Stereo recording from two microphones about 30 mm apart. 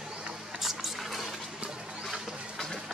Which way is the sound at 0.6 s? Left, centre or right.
Centre.